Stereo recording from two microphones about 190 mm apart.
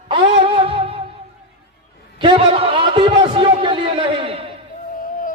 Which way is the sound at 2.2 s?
30° right (ahead or behind).